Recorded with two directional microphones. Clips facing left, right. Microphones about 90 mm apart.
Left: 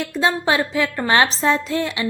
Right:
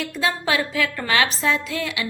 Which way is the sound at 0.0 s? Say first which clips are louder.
Left 4 dB; 30° left (ahead or behind).